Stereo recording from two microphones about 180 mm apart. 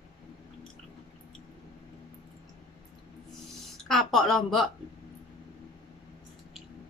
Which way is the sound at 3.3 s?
Centre (ahead or behind).